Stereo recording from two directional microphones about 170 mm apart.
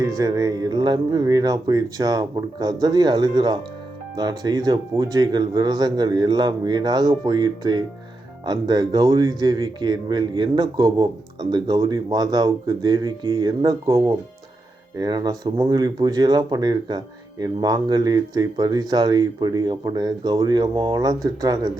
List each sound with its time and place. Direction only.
0.0 s speech: 20° right (ahead or behind)